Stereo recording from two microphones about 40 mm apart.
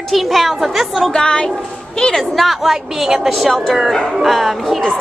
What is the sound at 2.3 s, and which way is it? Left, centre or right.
Speech, centre.